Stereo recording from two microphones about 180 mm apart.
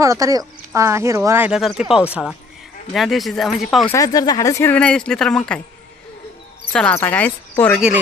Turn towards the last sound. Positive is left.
turn(degrees=10)  # may be behind; listen again after turning